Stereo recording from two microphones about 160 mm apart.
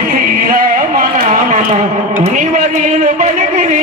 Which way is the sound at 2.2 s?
55° right (ahead or behind).